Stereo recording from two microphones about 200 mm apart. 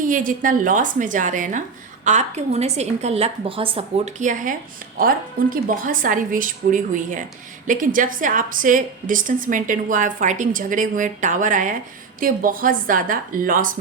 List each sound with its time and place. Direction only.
0.1 s a woman's voice: 40° right (ahead or behind)